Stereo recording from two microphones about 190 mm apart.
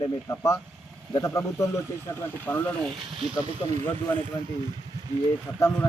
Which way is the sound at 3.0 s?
25° right (ahead or behind).